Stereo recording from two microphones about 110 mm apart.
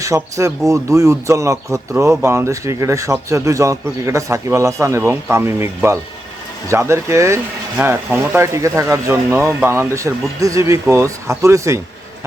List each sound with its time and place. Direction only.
0.0 s speech: 30° right (ahead or behind)